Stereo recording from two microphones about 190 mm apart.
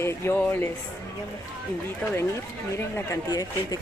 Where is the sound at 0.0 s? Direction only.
10° left (ahead or behind).